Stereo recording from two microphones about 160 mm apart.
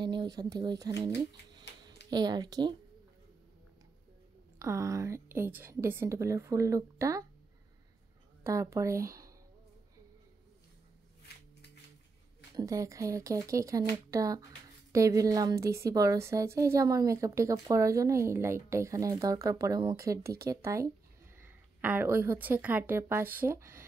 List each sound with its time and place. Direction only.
0.0 s a woman's voice: 30° right (ahead or behind)
4.6 s a woman's voice: 20° right (ahead or behind)
8.5 s a woman's voice: 20° right (ahead or behind)
12.5 s a woman's voice: 20° right (ahead or behind)